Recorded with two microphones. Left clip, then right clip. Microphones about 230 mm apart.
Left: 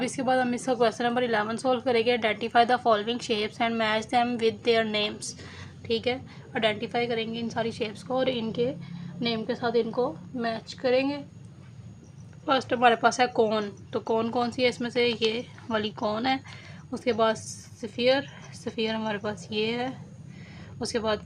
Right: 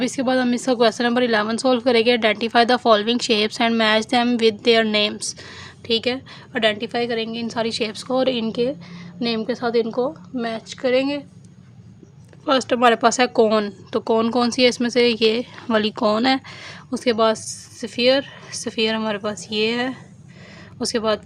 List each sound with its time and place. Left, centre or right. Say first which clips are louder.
0.0 s speech: right 5 dB; right
12.5 s speech: right 6 dB; right